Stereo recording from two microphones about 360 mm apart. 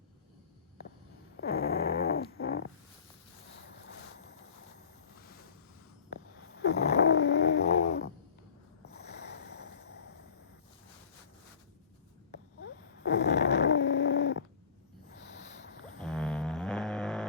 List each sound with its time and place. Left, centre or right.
1.4 s dog: left
6.6 s snoring: left
8.8 s snort: left
12.3 s snoring: left
13.7 s a sound: left
16.0 s a sound: centre